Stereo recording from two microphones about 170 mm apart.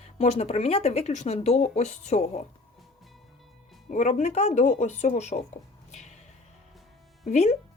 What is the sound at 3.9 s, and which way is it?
Speech, 45° left (ahead or behind).